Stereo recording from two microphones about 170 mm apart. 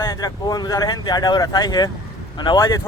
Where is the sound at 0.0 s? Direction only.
20° left (ahead or behind).